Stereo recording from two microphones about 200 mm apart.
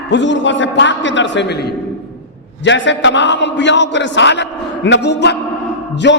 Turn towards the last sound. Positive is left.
turn(degrees=60)  # may be behind; listen again after turning